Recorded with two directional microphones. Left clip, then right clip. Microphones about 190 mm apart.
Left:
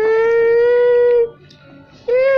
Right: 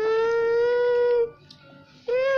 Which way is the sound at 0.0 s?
5° right (ahead or behind).